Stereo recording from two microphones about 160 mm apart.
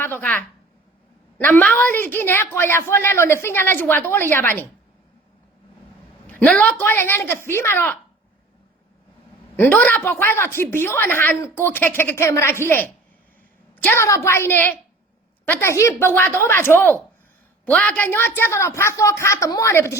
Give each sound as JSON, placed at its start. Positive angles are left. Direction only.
{"t": 0.0, "sound": "a woman's voice", "side_deg": 10}
{"t": 6.2, "sound": "a woman's voice", "side_deg": 10}
{"t": 9.6, "sound": "a woman's voice", "side_deg": 10}